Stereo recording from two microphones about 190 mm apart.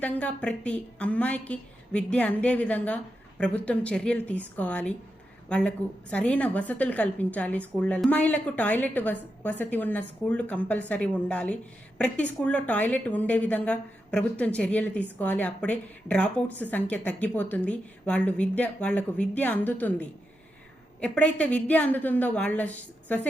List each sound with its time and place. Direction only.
0.0 s a woman's voice: 5° left (ahead or behind)